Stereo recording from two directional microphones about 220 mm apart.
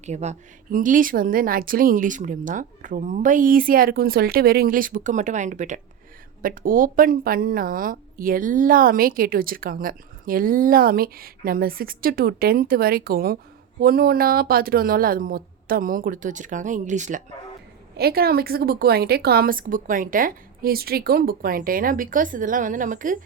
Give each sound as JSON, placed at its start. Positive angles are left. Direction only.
{"t": 0.0, "sound": "speech", "side_deg": -30}
{"t": 17.9, "sound": "speech", "side_deg": -45}